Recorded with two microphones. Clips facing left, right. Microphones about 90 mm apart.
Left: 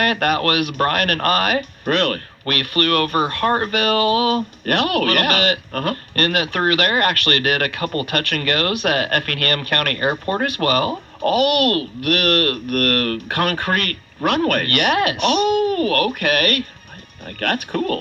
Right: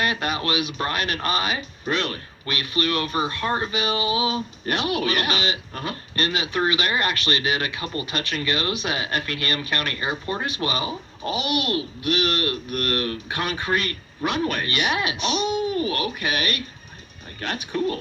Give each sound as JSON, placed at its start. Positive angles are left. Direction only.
{"t": 0.0, "sound": "speech", "side_deg": 55}